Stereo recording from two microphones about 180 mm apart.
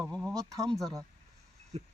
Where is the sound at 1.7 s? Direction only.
35° right (ahead or behind).